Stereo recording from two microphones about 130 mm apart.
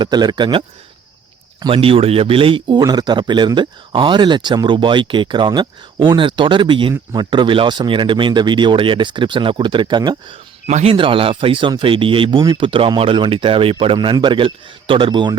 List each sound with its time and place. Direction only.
0.0 s speech: 30° right (ahead or behind)
1.7 s speech: 45° right (ahead or behind)
10.7 s speech: 65° right (ahead or behind)
10.9 s speech: 40° right (ahead or behind)